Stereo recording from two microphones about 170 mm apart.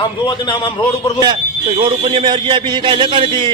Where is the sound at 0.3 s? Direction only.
25° left (ahead or behind).